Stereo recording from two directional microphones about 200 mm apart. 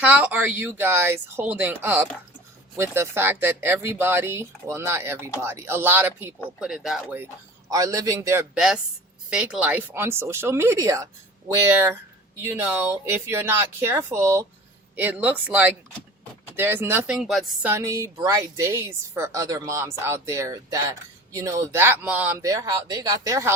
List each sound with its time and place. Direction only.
0.0 s speech: 5° right (ahead or behind)
7.7 s speech: 15° right (ahead or behind)